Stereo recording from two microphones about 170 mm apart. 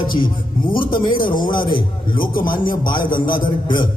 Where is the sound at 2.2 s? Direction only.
55° left (ahead or behind).